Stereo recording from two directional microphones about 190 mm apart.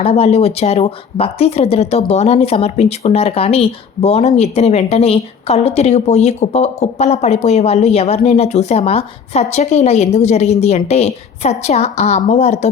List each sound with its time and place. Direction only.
0.0 s speech: 30° left (ahead or behind)